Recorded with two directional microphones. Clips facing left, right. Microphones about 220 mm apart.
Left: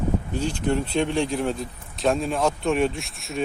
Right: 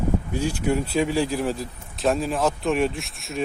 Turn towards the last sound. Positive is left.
turn(degrees=0)  # may be behind; listen again after turning